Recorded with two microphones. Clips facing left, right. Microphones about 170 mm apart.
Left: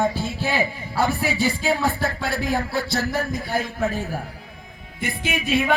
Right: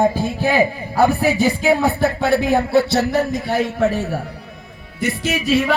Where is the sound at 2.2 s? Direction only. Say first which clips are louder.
Right 8 dB; 65° right (ahead or behind).